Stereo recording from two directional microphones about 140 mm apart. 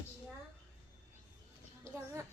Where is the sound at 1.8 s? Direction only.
20° right (ahead or behind).